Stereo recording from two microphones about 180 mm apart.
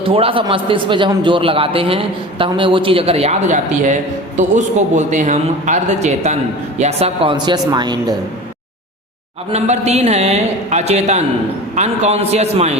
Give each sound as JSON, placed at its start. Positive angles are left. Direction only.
{"t": 0.0, "sound": "a man's voice", "side_deg": -30}
{"t": 9.5, "sound": "a man's voice", "side_deg": -35}